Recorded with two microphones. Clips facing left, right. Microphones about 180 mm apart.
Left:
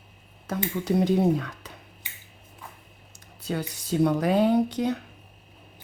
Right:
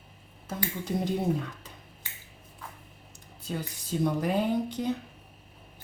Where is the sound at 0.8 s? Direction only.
75° left (ahead or behind).